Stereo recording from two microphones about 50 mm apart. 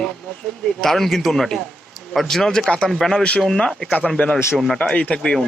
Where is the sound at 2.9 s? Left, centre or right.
Centre.